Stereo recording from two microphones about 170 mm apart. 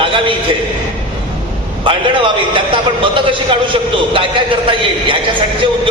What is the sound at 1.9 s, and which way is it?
A man's voice, 30° right (ahead or behind).